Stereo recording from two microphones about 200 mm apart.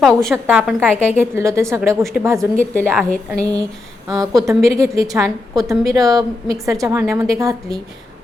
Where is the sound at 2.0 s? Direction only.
Centre (ahead or behind).